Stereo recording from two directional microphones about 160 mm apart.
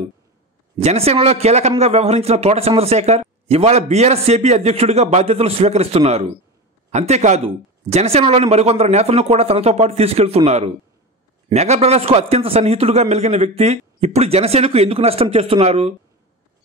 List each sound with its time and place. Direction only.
0.7 s a man's voice: 40° right (ahead or behind)